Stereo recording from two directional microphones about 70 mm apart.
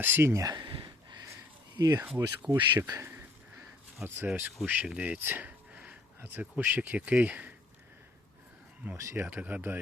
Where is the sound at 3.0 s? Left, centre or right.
Right.